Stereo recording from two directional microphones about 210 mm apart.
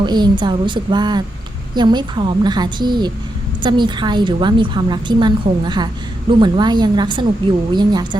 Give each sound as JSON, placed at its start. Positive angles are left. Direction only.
{"t": 0.0, "sound": "a woman's voice", "side_deg": -20}